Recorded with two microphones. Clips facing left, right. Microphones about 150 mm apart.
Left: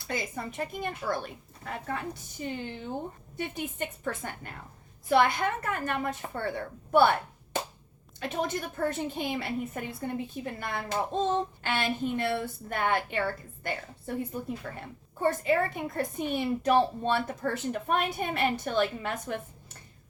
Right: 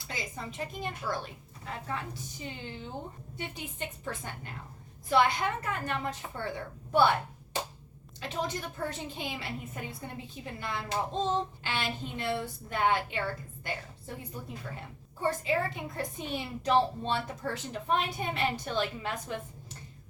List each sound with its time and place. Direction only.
0.1 s a woman's voice: 50° left (ahead or behind)
8.2 s a woman's voice: 50° left (ahead or behind)